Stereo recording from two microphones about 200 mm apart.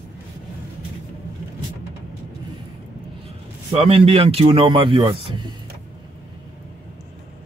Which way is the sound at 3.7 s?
30° right (ahead or behind).